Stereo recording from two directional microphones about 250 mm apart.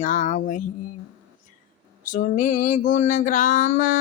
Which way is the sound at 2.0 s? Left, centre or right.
Left.